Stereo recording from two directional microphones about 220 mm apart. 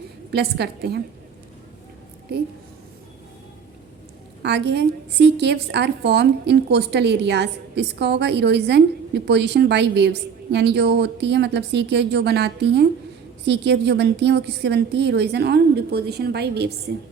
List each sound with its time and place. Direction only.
0.3 s a woman's voice: 45° right (ahead or behind)
4.4 s a woman's voice: 50° right (ahead or behind)